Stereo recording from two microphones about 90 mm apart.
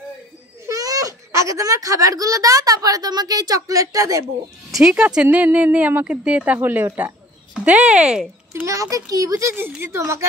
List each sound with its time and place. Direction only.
0.7 s speech: 40° right (ahead or behind)
4.6 s a child's voice: 5° right (ahead or behind)
8.6 s a child's voice: 35° right (ahead or behind)